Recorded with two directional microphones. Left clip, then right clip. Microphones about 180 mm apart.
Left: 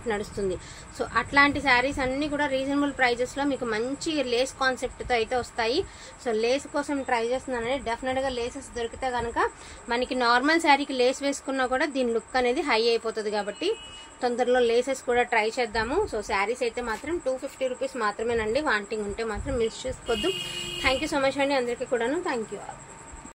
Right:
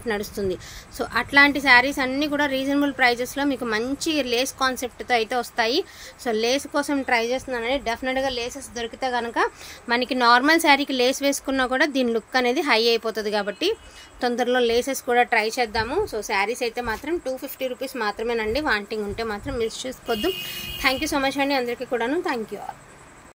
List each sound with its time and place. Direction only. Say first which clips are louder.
0.0 s a woman's voice: right 3 dB; 40° right (ahead or behind)